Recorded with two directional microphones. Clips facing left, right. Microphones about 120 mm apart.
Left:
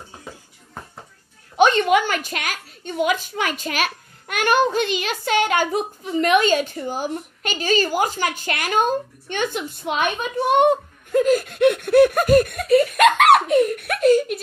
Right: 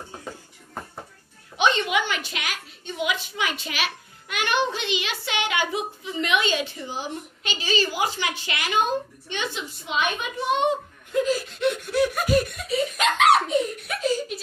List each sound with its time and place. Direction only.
1.6 s a woman's voice: 45° left (ahead or behind)